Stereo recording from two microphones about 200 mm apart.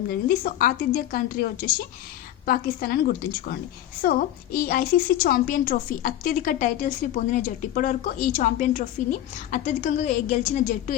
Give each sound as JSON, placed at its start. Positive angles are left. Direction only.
{"t": 0.1, "sound": "a woman's voice", "side_deg": 45}
{"t": 2.5, "sound": "a woman's voice", "side_deg": 50}